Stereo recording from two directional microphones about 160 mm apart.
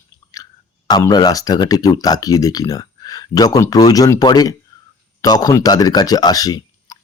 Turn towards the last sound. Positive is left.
turn(degrees=25)  # may be behind; listen again after turning